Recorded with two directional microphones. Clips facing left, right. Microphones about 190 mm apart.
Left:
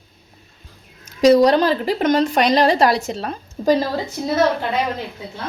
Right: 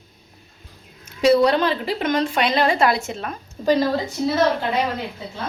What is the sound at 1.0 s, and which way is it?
A woman's voice, 40° left (ahead or behind).